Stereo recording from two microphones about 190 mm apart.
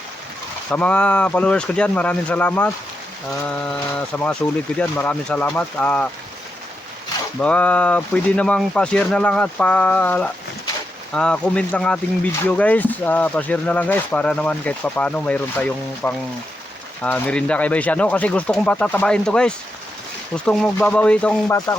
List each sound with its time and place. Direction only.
0.7 s speech: 5° left (ahead or behind)
7.3 s speech: 5° left (ahead or behind)